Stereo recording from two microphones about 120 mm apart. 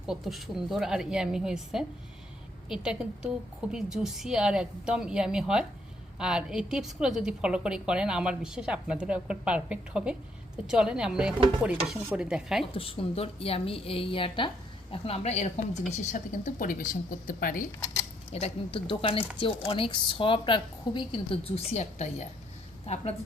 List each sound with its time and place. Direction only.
0.1 s a woman's voice: centre (ahead or behind)
12.7 s speech: 50° left (ahead or behind); by 15.8 s 70° left (ahead or behind)
15.9 s a woman's voice: 90° left
18.3 s speech: 55° left (ahead or behind)